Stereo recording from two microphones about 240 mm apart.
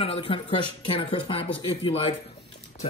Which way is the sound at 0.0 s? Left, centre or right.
Left.